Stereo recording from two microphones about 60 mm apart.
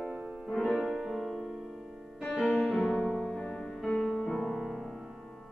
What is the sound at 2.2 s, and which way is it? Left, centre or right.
Music, centre.